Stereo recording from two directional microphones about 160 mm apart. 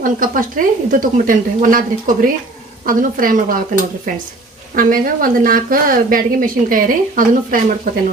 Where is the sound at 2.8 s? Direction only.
60° right (ahead or behind).